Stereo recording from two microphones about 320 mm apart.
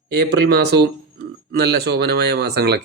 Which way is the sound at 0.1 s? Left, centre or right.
Right.